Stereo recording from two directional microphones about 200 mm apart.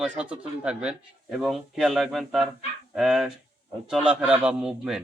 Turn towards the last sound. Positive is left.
turn(degrees=-5)  # may be behind; listen again after turning